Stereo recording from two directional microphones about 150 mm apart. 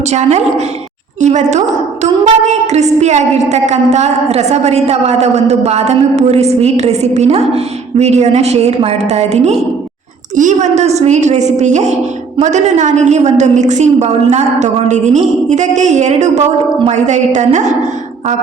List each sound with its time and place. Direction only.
0.1 s a woman's voice: 50° right (ahead or behind)